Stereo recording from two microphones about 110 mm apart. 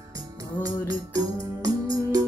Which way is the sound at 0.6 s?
35° right (ahead or behind).